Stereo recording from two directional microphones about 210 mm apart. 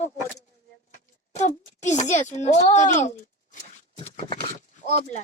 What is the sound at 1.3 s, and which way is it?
A child's voice, 35° left (ahead or behind).